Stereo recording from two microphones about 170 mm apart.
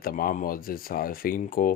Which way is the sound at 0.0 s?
60° left (ahead or behind).